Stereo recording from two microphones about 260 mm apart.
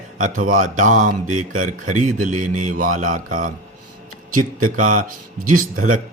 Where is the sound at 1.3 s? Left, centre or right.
Right.